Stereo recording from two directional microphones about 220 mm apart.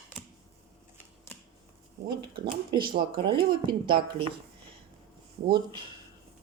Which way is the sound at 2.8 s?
40° right (ahead or behind).